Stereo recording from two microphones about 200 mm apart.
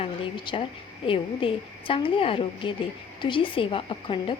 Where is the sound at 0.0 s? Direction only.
25° left (ahead or behind).